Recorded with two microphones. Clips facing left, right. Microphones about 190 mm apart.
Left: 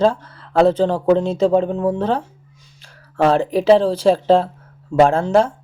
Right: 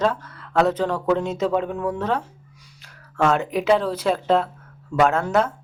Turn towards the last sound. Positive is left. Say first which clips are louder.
# left 5 dB
turn(degrees=30)  # may be behind; listen again after turning